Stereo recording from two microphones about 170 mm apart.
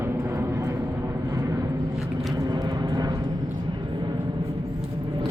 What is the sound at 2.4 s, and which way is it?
Vehicle, 25° right (ahead or behind).